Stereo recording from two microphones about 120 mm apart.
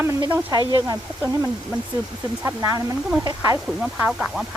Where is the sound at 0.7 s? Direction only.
35° right (ahead or behind).